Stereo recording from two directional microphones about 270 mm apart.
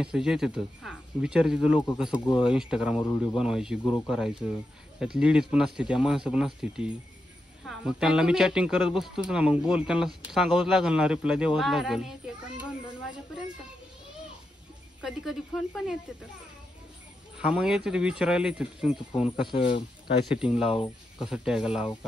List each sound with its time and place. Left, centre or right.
0.0 s a man's voice: centre
15.0 s a man's voice: centre
17.4 s a man's voice: centre
18.9 s speech: left
20.3 s a man's voice: centre
20.7 s speech: centre
21.3 s a man's voice: centre